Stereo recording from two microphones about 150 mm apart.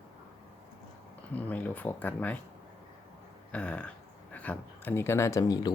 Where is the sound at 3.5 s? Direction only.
10° left (ahead or behind).